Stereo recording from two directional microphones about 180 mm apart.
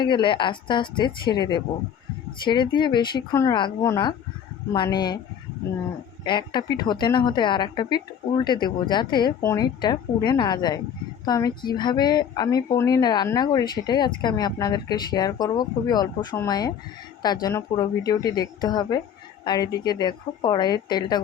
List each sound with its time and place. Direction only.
0.0 s speech: 25° left (ahead or behind)
6.2 s speech: 25° left (ahead or behind)